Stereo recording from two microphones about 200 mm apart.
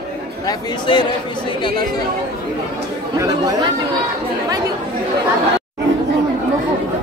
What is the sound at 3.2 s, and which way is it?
Speech, 15° right (ahead or behind).